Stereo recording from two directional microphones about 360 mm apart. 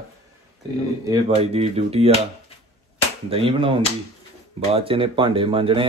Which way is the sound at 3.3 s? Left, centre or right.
Centre.